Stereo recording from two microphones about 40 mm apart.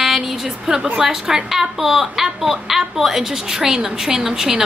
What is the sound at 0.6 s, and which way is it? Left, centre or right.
A woman's voice, centre.